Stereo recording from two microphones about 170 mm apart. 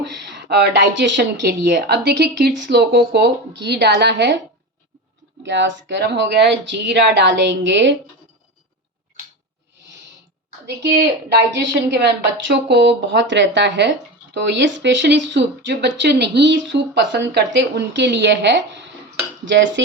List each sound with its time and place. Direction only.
0.0 s speech: 85° right
5.4 s speech: 90° right
10.7 s speech: 75° right (ahead or behind); by 19.8 s 90° right